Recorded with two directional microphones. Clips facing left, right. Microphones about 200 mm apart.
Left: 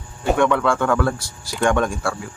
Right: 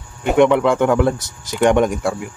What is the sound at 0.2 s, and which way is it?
Speech, 20° right (ahead or behind).